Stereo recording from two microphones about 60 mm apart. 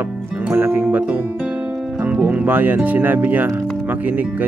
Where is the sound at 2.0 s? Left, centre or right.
Right.